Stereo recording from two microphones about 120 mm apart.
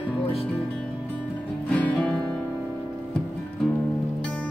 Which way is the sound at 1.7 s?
10° left (ahead or behind).